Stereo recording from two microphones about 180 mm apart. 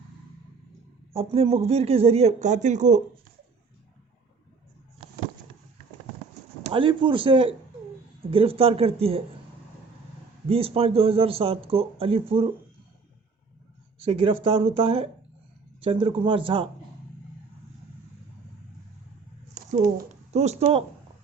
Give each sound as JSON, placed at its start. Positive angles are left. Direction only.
{"t": 1.1, "sound": "speech", "side_deg": -35}
{"t": 6.6, "sound": "speech", "side_deg": -35}
{"t": 10.5, "sound": "speech", "side_deg": -30}
{"t": 14.0, "sound": "speech", "side_deg": -30}
{"t": 19.5, "sound": "a sound", "side_deg": -45}
{"t": 20.3, "sound": "speech", "side_deg": -35}